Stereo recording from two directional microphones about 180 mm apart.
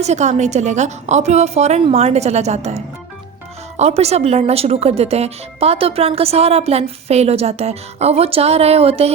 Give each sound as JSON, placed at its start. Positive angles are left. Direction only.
{"t": 0.0, "sound": "speech", "side_deg": -40}